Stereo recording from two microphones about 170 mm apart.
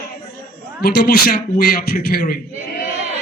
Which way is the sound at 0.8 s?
65° left (ahead or behind).